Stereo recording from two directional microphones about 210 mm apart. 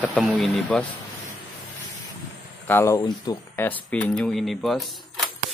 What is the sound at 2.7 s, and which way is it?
Speech, 10° left (ahead or behind).